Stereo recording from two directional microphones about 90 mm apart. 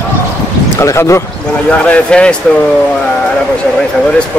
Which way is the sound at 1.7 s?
15° left (ahead or behind).